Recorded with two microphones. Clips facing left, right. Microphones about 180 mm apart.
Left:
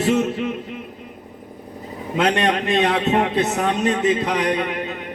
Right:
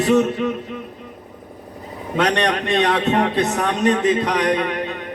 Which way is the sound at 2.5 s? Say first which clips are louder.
Even; 40° right (ahead or behind).